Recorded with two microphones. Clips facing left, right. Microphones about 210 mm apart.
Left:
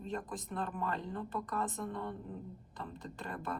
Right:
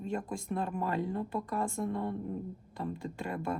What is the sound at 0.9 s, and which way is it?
Speech, 10° right (ahead or behind).